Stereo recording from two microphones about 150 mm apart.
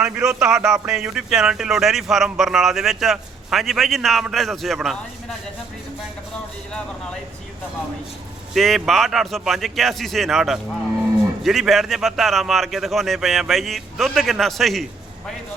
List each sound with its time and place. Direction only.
0.0 s speech: 5° right (ahead or behind)
8.5 s speech: centre (ahead or behind)